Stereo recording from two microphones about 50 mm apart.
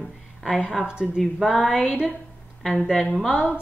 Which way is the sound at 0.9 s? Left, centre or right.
Centre.